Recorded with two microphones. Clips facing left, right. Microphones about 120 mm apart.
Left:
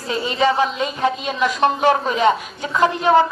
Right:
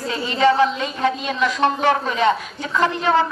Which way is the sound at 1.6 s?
20° left (ahead or behind).